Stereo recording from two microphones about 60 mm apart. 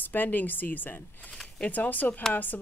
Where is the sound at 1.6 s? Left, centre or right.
Left.